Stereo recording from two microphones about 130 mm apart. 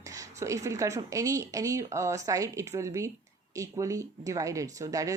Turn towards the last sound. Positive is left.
turn(degrees=-25)  # may be behind; listen again after turning